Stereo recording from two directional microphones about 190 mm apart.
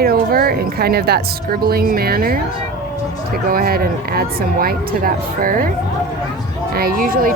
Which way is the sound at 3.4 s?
50° right (ahead or behind).